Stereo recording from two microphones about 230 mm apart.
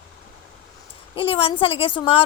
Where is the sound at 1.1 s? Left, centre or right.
Left.